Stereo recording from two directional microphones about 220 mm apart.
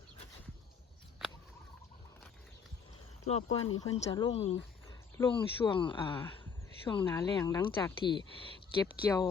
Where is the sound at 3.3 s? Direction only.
25° left (ahead or behind).